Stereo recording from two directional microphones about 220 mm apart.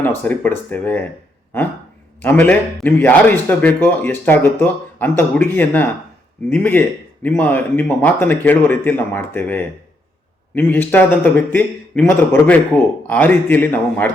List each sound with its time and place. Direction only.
0.0 s a man's voice: 10° left (ahead or behind)
2.2 s a man's voice: 10° left (ahead or behind)